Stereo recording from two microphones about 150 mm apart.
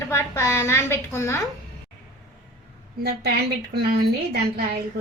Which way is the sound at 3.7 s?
90° right.